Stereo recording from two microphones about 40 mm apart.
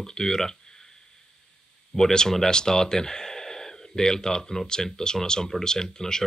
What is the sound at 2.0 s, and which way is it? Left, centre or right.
Speech, centre.